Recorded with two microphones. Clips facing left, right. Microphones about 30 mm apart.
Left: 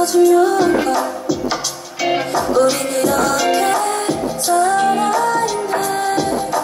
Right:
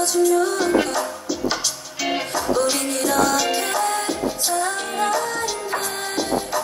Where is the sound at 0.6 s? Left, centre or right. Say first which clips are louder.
Left 4 dB; centre.